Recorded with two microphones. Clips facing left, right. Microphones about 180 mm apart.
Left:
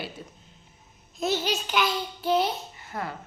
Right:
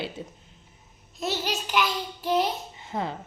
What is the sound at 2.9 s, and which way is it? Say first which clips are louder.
Speech: right 4 dB; 20° right (ahead or behind).